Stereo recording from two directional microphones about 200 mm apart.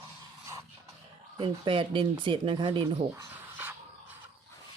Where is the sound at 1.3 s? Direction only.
25° right (ahead or behind).